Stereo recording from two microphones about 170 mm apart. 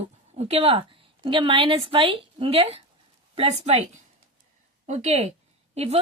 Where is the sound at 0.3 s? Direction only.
35° right (ahead or behind).